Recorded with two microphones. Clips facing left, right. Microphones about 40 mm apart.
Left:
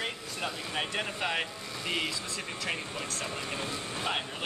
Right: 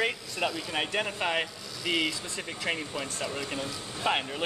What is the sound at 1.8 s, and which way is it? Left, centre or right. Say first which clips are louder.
Speech: right 4 dB; right.